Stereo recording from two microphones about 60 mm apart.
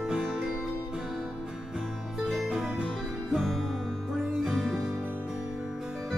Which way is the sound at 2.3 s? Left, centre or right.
Centre.